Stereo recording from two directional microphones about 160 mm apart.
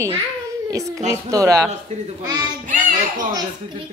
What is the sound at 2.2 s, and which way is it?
Speech, 25° right (ahead or behind).